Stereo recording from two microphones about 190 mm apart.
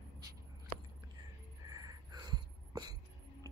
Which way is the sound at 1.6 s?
20° right (ahead or behind).